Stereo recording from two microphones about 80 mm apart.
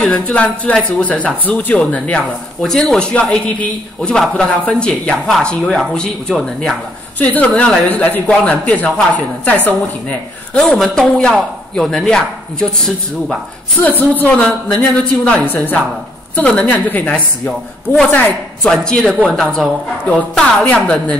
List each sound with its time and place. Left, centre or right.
0.0 s speech: centre
2.6 s speech: centre
7.2 s speech: centre
10.6 s speech: centre
13.7 s a man's voice: left
17.5 s a woman's voice: centre
20.1 s speech: centre